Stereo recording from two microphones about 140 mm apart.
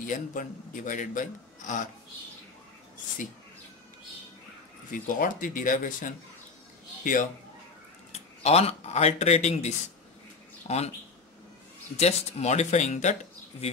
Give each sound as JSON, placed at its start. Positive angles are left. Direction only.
{"t": 0.0, "sound": "a man's voice", "side_deg": 70}
{"t": 4.9, "sound": "a man's voice", "side_deg": 80}
{"t": 8.1, "sound": "speech", "side_deg": 50}
{"t": 12.0, "sound": "speech", "side_deg": 50}